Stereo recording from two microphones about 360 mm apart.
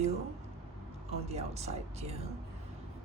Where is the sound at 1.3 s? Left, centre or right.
Centre.